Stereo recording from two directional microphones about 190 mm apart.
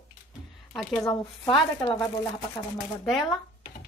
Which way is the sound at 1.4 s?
20° left (ahead or behind).